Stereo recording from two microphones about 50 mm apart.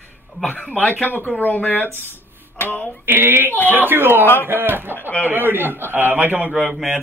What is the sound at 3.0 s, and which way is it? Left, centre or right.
A man's voice, right.